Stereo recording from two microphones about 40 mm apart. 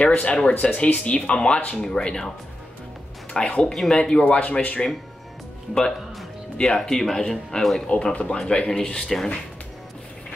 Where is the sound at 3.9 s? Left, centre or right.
Centre.